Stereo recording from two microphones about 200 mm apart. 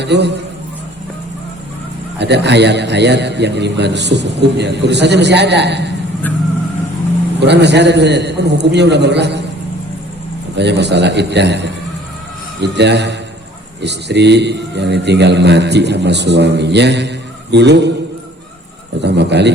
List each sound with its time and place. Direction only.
0.0 s a man's voice: 60° right (ahead or behind)
2.1 s a man's voice: 60° right (ahead or behind)
7.3 s a man's voice: 60° right (ahead or behind)
10.5 s a man's voice: 60° right (ahead or behind)
18.9 s a sound: 60° right (ahead or behind)